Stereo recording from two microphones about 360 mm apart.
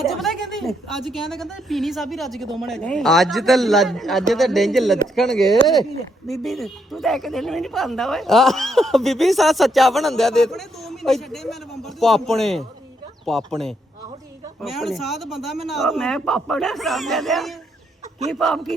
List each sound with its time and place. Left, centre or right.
0.1 s a woman's voice: centre